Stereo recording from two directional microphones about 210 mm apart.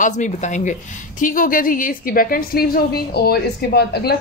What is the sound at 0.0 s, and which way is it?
A woman's voice, 35° left (ahead or behind).